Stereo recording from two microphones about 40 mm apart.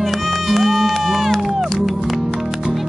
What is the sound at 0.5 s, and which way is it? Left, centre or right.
Run, centre.